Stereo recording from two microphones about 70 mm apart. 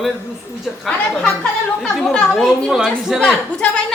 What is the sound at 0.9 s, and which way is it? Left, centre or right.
Speech, centre.